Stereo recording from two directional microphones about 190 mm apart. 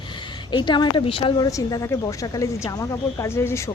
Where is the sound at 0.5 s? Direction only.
25° left (ahead or behind).